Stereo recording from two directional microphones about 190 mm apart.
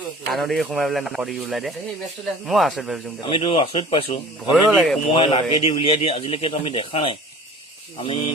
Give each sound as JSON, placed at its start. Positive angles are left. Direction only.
{"t": 0.3, "sound": "speech", "side_deg": 0}
{"t": 3.2, "sound": "a man's voice", "side_deg": 25}
{"t": 4.5, "sound": "speech", "side_deg": -5}
{"t": 5.1, "sound": "a man's voice", "side_deg": 25}